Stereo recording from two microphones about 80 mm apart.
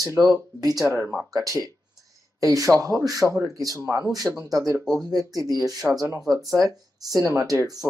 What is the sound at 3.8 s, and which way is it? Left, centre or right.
Speech, right.